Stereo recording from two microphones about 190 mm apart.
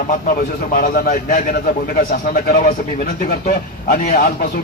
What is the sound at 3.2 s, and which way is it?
A man's voice, 50° left (ahead or behind).